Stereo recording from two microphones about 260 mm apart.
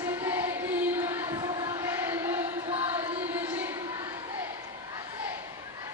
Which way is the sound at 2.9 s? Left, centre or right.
Centre.